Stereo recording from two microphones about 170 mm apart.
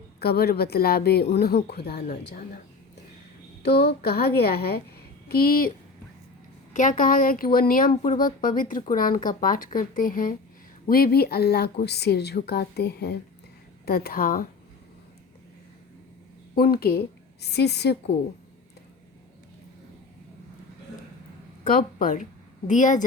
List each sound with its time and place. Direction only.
0.2 s a woman's voice: 70° left (ahead or behind)
3.6 s a woman's voice: 70° left (ahead or behind)
6.7 s a woman's voice: 50° left (ahead or behind)
16.7 s speech: 65° left (ahead or behind)
17.4 s a woman's voice: 75° left (ahead or behind)
21.6 s a woman's voice: 55° left (ahead or behind)